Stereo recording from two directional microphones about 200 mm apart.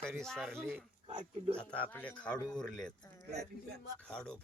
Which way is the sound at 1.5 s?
5° left (ahead or behind).